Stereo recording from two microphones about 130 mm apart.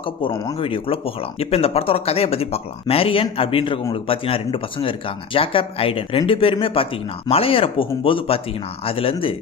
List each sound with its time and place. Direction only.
0.0 s speech: 40° left (ahead or behind)